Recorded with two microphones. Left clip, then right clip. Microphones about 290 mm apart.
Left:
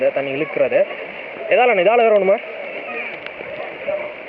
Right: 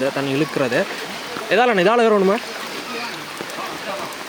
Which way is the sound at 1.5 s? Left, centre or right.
Right.